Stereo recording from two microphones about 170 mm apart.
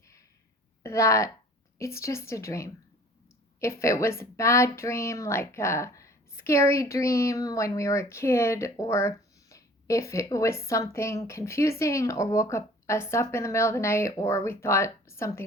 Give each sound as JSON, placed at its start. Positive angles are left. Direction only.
{"t": 0.8, "sound": "a woman's voice", "side_deg": 15}